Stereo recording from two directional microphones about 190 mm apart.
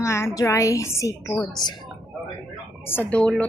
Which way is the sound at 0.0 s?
15° left (ahead or behind).